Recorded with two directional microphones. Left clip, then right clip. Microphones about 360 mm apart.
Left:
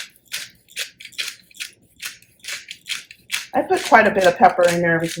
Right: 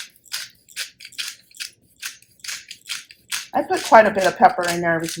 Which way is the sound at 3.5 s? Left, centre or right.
Right.